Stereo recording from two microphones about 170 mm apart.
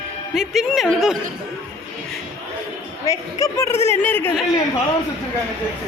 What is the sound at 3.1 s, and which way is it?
A woman's voice, 20° left (ahead or behind).